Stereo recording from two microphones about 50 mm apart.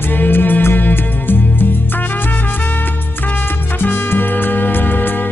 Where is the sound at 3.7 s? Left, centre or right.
Left.